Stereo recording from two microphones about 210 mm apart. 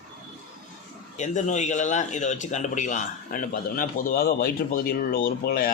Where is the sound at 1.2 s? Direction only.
35° left (ahead or behind).